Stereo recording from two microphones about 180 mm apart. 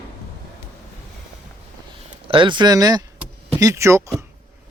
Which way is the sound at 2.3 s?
25° right (ahead or behind).